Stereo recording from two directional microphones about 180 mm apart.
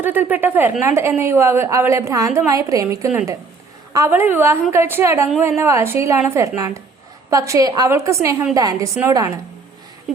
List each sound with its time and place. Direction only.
0.0 s a woman's voice: 10° right (ahead or behind)